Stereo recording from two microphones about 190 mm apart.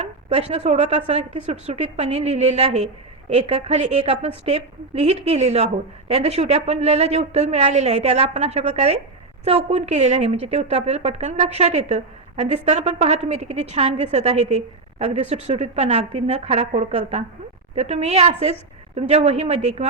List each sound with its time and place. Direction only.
0.3 s a woman's voice: 35° right (ahead or behind)